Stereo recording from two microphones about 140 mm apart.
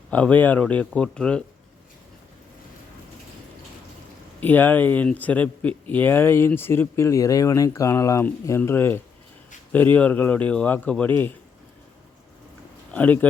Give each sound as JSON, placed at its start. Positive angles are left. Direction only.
{"t": 0.1, "sound": "speech", "side_deg": 10}
{"t": 4.4, "sound": "speech", "side_deg": 15}
{"t": 12.9, "sound": "speech", "side_deg": 10}